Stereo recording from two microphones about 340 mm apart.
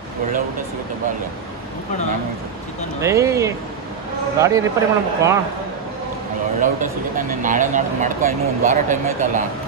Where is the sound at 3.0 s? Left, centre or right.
Centre.